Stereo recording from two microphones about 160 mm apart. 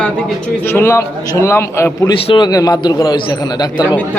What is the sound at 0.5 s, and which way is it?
A man's voice, 15° left (ahead or behind).